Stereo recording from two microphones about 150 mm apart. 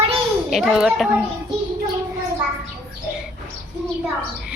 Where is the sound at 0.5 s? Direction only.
Centre (ahead or behind).